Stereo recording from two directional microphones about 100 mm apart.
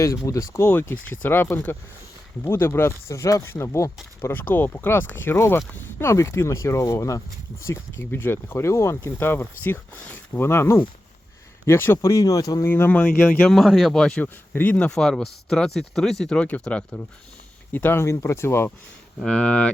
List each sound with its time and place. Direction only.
0.0 s speech: 35° left (ahead or behind)
12.1 s speech: 35° left (ahead or behind)
12.6 s speech: 20° left (ahead or behind)
13.6 s speech: centre (ahead or behind)
14.5 s speech: 15° left (ahead or behind)
17.7 s speech: 20° left (ahead or behind)
19.2 s speech: 5° left (ahead or behind)